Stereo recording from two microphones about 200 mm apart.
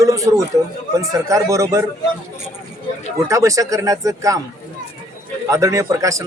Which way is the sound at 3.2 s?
15° right (ahead or behind).